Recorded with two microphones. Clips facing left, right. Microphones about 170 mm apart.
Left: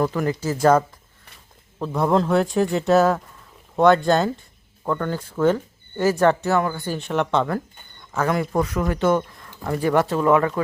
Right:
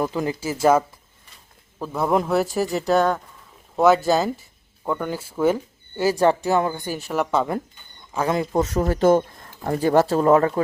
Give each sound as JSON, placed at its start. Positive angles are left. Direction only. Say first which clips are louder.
{"t": 0.0, "sound": "speech", "louder": "left 2 dB", "side_deg": -15}
{"t": 6.6, "sound": "speech", "louder": "even", "side_deg": -25}
{"t": 6.8, "sound": "speech", "louder": "left 1 dB", "side_deg": -5}
{"t": 8.3, "sound": "speech", "louder": "right 1 dB", "side_deg": -25}
{"t": 8.7, "sound": "speech", "louder": "right 5 dB", "side_deg": -35}